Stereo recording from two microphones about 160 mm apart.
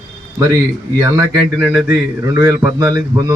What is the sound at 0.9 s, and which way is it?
A man's voice, 20° right (ahead or behind).